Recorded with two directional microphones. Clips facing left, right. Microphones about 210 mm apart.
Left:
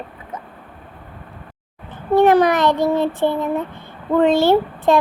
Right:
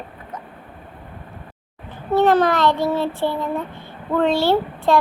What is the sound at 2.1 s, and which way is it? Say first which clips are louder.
Child singing: left 3 dB; 15° left (ahead or behind).